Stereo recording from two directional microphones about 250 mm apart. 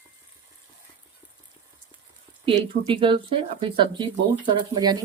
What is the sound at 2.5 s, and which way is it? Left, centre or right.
Speech, centre.